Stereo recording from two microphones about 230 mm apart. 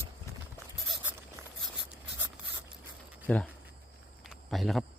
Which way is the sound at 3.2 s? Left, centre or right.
Centre.